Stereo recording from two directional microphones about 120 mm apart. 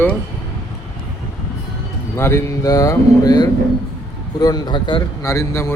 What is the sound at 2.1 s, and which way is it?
A man's voice, 20° left (ahead or behind).